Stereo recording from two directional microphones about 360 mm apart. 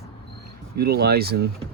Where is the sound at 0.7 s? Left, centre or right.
Right.